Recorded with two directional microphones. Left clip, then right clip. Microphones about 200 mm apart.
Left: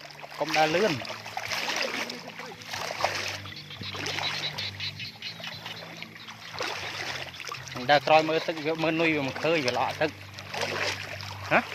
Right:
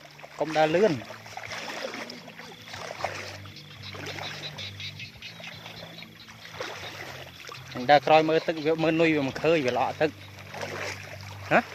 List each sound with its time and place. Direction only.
0.3 s speech: 35° right (ahead or behind)
1.0 s a sound: 40° left (ahead or behind)
2.7 s splash: 40° left (ahead or behind)
3.9 s music: 30° left (ahead or behind)
6.6 s a sound: 35° left (ahead or behind)
7.7 s speech: 35° right (ahead or behind)
10.5 s splash: 40° left (ahead or behind)
11.5 s speech: 45° right (ahead or behind)